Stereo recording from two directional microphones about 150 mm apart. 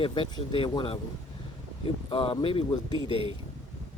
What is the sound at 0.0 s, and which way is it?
Speech, 35° left (ahead or behind).